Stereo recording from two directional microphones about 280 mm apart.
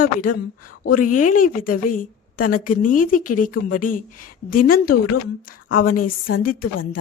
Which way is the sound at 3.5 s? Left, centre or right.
Left.